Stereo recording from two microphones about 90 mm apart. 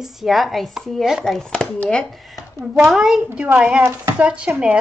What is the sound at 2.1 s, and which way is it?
Speech, centre (ahead or behind).